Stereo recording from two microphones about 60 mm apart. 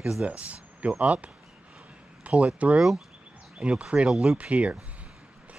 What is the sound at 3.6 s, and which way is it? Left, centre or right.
Speech, right.